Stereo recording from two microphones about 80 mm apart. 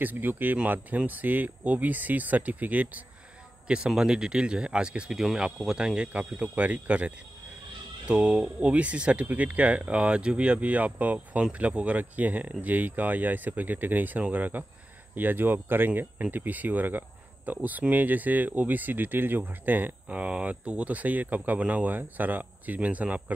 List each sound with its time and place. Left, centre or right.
0.0 s speech: right